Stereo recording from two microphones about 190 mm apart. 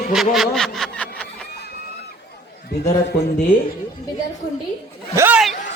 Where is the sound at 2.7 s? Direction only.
60° left (ahead or behind).